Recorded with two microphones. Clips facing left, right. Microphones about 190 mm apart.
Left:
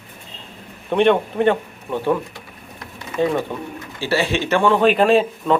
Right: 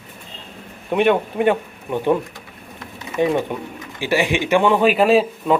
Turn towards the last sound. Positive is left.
turn(degrees=-5)  # may be behind; listen again after turning